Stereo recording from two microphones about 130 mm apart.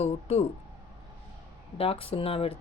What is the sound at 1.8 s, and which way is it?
Speech, 45° left (ahead or behind).